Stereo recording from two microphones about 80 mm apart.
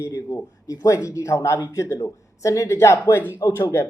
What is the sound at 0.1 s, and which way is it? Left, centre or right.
Speech, left.